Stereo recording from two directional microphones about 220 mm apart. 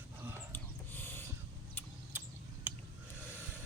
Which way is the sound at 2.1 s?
10° right (ahead or behind).